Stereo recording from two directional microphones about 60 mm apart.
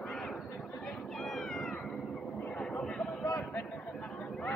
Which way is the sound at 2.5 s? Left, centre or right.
Centre.